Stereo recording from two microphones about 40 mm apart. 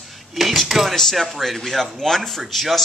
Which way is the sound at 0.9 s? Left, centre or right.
Centre.